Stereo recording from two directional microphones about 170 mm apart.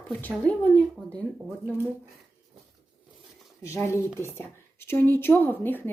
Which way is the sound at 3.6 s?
15° left (ahead or behind).